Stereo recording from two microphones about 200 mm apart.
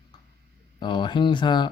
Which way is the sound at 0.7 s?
20° left (ahead or behind).